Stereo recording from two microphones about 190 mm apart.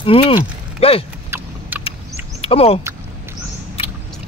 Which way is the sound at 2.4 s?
30° left (ahead or behind).